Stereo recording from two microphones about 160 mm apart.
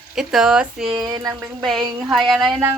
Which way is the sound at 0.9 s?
25° right (ahead or behind).